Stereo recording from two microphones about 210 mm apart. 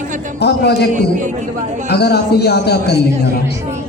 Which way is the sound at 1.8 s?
50° left (ahead or behind).